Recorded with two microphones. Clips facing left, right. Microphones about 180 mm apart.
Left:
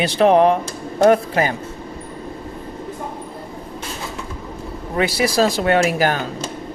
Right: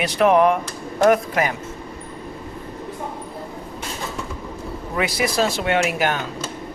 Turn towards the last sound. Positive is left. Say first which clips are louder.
# left 3 dB
turn(degrees=35)  # may be behind; listen again after turning